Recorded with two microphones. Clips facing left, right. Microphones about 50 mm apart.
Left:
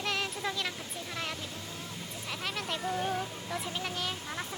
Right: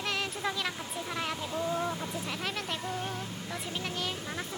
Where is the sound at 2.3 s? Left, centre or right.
Centre.